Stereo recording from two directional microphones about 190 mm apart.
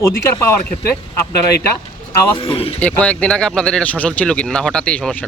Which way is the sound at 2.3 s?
30° left (ahead or behind).